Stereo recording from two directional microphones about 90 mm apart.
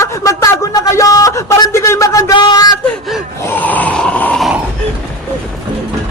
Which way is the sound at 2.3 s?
50° left (ahead or behind).